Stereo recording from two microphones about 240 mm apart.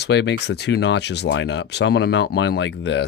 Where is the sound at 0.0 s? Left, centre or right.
Left.